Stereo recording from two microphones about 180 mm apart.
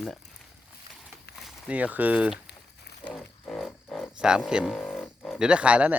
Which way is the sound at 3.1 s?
5° left (ahead or behind).